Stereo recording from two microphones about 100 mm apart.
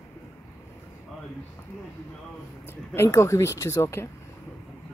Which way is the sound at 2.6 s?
25° left (ahead or behind).